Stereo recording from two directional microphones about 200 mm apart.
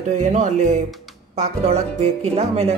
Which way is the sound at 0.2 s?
35° right (ahead or behind).